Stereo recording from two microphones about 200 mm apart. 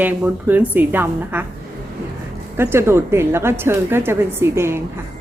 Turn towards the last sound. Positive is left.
turn(degrees=-10)  # may be behind; listen again after turning